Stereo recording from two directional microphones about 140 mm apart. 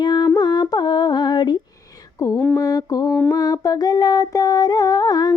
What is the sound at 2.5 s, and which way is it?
Mantra, 25° left (ahead or behind).